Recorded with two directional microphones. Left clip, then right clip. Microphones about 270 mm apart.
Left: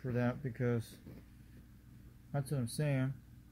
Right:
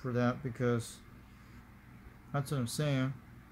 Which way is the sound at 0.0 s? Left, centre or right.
Centre.